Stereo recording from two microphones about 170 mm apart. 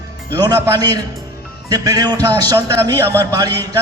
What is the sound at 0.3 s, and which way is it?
A man's voice, 20° right (ahead or behind).